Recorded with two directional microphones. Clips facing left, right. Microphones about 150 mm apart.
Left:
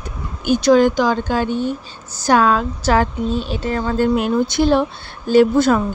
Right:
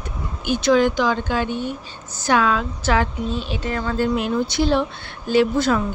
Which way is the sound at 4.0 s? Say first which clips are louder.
Left 4 dB; 50° left (ahead or behind).